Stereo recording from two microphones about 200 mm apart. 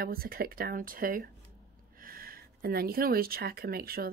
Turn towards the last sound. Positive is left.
turn(degrees=-50)  # may be behind; listen again after turning